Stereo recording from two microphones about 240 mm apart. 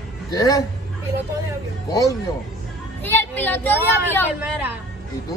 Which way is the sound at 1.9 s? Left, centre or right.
Centre.